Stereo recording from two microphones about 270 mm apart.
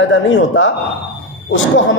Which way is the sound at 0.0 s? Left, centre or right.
Left.